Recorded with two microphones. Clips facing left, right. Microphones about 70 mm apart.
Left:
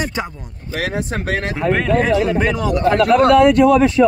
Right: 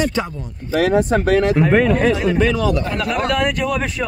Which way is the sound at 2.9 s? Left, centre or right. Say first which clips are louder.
Left 8 dB; left.